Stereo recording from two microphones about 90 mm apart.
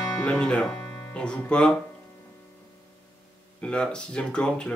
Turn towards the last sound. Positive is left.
turn(degrees=10)  # may be behind; listen again after turning